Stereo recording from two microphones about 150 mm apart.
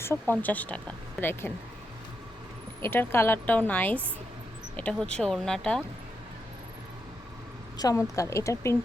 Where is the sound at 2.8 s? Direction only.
15° left (ahead or behind).